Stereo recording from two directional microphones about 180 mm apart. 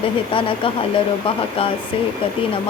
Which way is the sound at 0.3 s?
30° left (ahead or behind).